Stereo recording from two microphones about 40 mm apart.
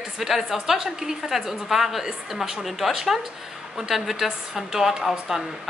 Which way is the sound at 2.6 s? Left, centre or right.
Centre.